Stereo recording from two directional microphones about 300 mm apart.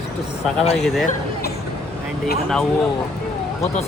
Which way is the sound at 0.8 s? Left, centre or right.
Centre.